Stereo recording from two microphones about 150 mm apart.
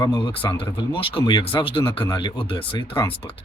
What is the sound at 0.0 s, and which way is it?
Speech, 30° left (ahead or behind).